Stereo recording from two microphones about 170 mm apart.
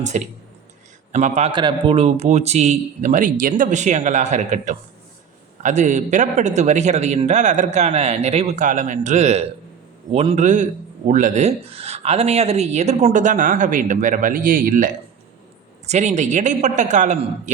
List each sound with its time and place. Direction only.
0.1 s a man's voice: 45° right (ahead or behind)
15.9 s a man's voice: 40° right (ahead or behind)